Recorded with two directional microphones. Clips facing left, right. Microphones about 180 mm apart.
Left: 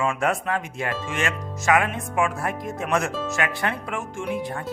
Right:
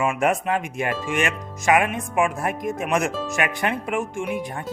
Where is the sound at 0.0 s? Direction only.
15° right (ahead or behind).